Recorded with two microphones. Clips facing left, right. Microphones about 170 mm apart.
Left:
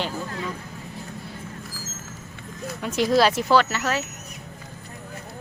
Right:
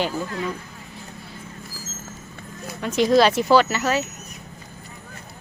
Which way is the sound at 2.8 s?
5° left (ahead or behind).